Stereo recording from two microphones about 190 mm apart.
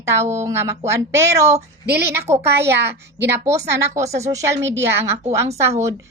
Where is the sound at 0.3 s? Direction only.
15° right (ahead or behind).